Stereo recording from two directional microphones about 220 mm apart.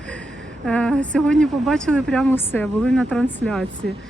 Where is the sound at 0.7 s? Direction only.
5° left (ahead or behind).